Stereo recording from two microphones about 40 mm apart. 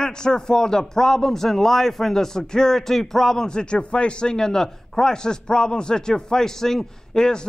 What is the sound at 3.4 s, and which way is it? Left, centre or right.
A man's voice, left.